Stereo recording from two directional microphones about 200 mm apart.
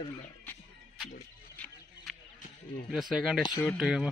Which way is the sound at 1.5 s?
5° left (ahead or behind).